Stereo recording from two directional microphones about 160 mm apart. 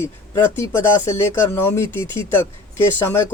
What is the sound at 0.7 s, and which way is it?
Speech, 15° left (ahead or behind).